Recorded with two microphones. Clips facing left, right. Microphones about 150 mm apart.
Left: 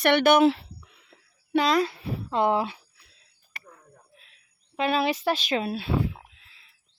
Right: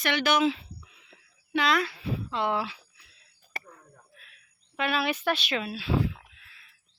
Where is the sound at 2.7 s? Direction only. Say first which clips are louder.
Left 1 dB; 35° left (ahead or behind).